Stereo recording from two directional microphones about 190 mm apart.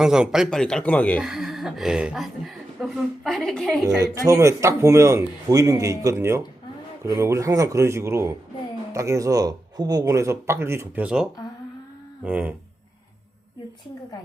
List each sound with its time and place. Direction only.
0.0 s a woman's voice: 5° right (ahead or behind)
4.0 s a man's voice: 15° right (ahead or behind)